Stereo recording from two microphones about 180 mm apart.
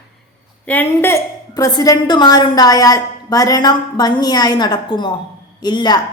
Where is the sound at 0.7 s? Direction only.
10° left (ahead or behind).